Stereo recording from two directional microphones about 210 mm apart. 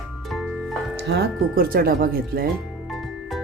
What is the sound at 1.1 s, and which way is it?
Speech, 50° right (ahead or behind).